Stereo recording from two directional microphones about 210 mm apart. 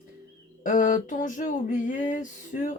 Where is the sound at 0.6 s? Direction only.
35° left (ahead or behind).